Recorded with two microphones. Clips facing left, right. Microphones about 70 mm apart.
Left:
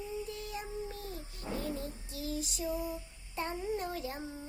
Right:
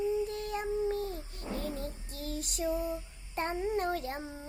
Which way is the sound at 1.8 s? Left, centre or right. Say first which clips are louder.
Right 1 dB; right.